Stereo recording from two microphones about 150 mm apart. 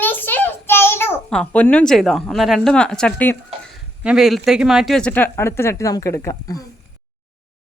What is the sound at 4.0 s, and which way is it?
Speech, 5° right (ahead or behind).